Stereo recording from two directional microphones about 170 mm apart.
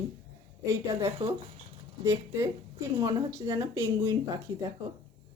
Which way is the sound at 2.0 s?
15° right (ahead or behind).